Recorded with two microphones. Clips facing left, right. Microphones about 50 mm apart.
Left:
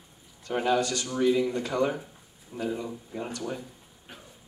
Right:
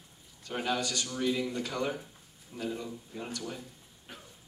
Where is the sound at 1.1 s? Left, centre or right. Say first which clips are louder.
Left 8 dB; left.